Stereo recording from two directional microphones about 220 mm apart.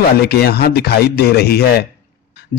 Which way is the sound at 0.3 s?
45° left (ahead or behind).